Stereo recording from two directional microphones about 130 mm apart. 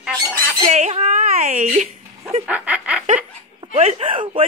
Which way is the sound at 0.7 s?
60° right (ahead or behind).